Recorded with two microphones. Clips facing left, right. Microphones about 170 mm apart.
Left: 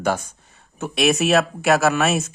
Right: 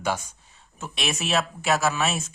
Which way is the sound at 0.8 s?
65° left (ahead or behind).